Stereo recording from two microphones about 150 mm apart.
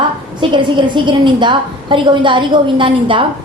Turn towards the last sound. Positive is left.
turn(degrees=-35)  # may be behind; listen again after turning